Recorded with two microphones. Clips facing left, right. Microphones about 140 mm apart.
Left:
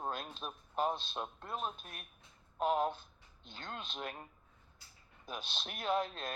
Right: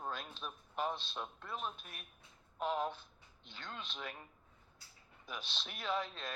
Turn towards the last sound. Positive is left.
turn(degrees=50)  # may be behind; listen again after turning